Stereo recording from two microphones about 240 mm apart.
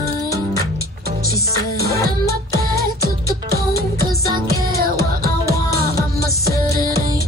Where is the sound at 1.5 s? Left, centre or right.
Centre.